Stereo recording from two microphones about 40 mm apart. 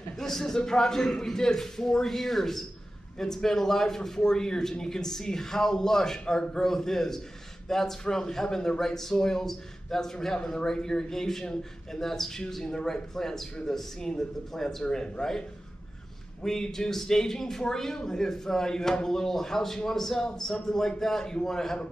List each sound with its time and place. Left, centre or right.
0.2 s speech: centre
16.4 s speech: centre